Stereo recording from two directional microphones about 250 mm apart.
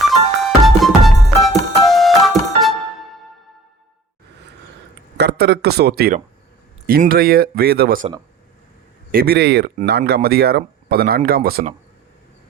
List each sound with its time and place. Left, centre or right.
0.0 s music: centre
5.1 s a man's voice: right
9.1 s speech: right